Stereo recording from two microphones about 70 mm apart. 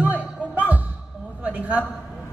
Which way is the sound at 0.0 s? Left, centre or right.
Right.